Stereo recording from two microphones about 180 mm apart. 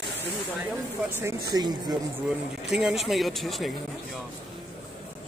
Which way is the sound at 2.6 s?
Centre (ahead or behind).